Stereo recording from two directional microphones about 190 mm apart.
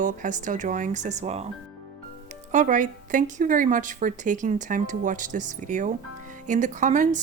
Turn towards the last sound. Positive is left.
turn(degrees=-40)  # may be behind; listen again after turning